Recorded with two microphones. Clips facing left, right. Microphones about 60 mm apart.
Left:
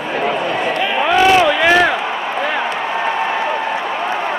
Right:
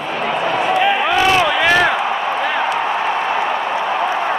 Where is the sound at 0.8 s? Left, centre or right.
Centre.